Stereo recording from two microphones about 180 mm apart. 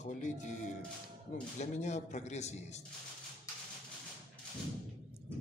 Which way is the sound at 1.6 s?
40° left (ahead or behind).